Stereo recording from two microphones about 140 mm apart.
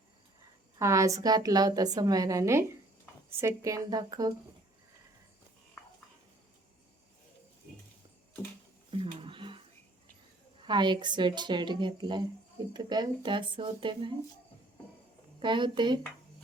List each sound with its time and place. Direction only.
0.8 s a woman's voice: 20° right (ahead or behind)
8.9 s a sound: 40° right (ahead or behind)
10.6 s speech: 35° right (ahead or behind)
15.4 s speech: 35° right (ahead or behind)